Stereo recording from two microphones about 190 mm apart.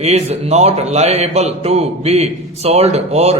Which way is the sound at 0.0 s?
35° right (ahead or behind).